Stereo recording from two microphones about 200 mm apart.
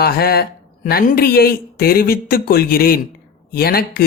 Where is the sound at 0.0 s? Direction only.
50° left (ahead or behind).